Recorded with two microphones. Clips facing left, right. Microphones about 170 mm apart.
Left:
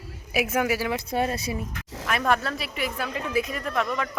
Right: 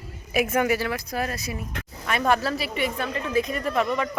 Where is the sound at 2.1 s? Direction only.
Centre (ahead or behind).